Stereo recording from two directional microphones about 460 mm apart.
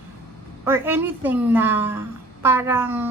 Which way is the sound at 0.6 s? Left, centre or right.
Centre.